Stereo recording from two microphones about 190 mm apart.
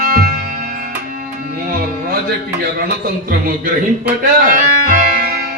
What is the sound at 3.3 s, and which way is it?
Organ, 50° right (ahead or behind).